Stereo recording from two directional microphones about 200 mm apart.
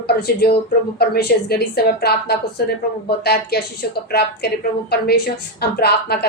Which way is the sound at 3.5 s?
50° left (ahead or behind).